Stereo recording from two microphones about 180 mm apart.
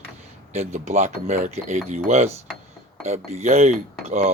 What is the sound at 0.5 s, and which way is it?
Speech, 35° right (ahead or behind).